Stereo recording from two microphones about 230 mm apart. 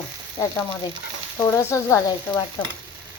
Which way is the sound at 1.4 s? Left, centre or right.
Centre.